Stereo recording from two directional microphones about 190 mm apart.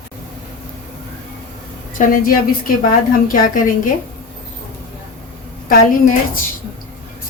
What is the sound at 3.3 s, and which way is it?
Speech, 45° left (ahead or behind).